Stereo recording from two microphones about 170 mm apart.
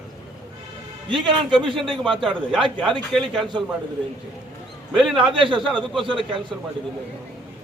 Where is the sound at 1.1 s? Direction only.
30° right (ahead or behind).